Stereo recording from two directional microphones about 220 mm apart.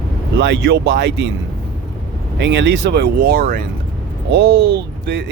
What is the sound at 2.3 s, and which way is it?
Speech, 50° right (ahead or behind).